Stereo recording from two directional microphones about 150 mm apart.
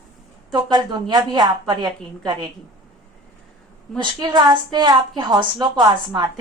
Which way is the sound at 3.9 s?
30° right (ahead or behind).